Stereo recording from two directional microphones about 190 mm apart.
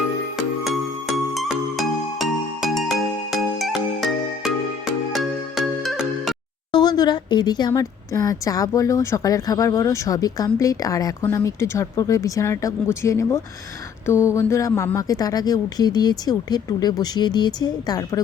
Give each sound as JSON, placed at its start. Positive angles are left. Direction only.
{"t": 1.1, "sound": "music", "side_deg": 0}
{"t": 5.1, "sound": "music", "side_deg": 0}
{"t": 6.7, "sound": "speech", "side_deg": 20}